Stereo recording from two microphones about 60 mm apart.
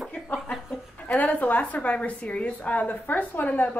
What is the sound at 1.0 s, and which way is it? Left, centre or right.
A woman's voice, left.